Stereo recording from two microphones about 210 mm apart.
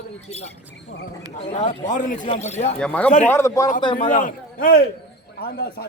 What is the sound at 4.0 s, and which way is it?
Speech, 40° left (ahead or behind).